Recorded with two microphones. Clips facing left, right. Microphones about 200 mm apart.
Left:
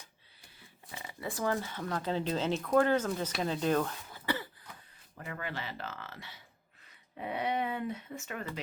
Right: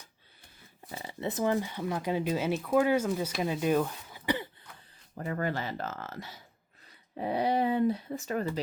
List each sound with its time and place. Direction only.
0.9 s shuffling cards: 35° right (ahead or behind)
1.2 s speech: 20° right (ahead or behind)
5.1 s speech: 40° right (ahead or behind)